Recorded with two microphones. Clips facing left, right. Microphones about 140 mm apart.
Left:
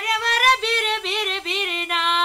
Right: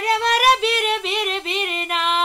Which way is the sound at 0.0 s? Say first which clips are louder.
Right 5 dB; 30° right (ahead or behind).